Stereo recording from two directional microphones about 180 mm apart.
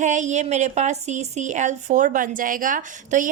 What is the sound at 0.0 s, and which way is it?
Speech, 45° right (ahead or behind).